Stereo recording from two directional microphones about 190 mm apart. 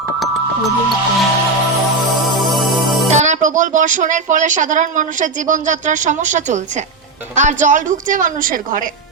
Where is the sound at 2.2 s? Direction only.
Centre (ahead or behind).